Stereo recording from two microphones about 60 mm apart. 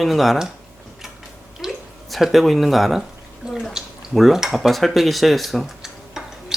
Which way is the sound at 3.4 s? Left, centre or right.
Centre.